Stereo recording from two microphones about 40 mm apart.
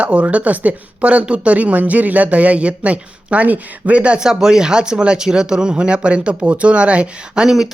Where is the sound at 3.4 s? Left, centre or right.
Right.